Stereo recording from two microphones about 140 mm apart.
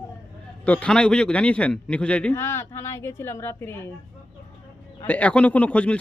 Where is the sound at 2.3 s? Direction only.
20° left (ahead or behind).